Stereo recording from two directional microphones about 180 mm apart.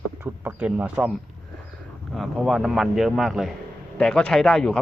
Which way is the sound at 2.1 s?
Centre (ahead or behind).